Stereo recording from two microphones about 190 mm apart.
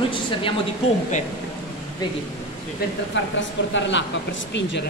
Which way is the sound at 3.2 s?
75° left (ahead or behind).